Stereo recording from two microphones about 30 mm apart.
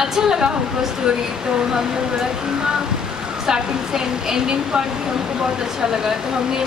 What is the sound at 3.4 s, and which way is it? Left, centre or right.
A woman's voice, centre.